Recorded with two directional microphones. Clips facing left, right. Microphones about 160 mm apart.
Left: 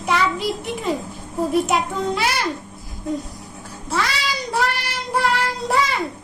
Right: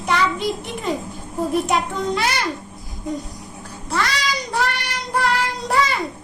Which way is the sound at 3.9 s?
Centre (ahead or behind).